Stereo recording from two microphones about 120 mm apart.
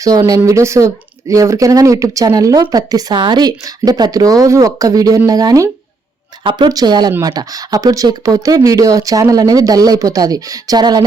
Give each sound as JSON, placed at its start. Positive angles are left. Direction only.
{"t": 0.2, "sound": "speech", "side_deg": -30}
{"t": 6.4, "sound": "speech", "side_deg": -40}